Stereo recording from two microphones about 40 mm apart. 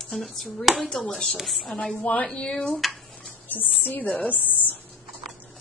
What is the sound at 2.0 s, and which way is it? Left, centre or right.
Speech, left.